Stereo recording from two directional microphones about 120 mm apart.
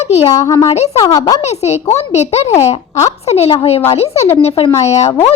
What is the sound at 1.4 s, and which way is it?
A child's voice, 65° left (ahead or behind).